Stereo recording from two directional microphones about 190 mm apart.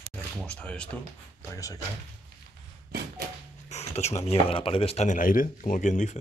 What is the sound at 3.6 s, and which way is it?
Speech, 35° left (ahead or behind).